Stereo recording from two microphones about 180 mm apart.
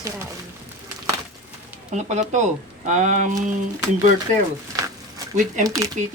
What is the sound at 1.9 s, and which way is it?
Speech, 40° right (ahead or behind).